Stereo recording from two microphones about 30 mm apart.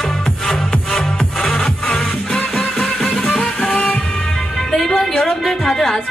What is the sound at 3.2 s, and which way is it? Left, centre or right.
Music, left.